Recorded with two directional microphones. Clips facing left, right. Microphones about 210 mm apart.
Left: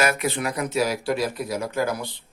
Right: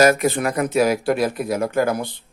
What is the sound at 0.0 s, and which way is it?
Speech, 45° right (ahead or behind).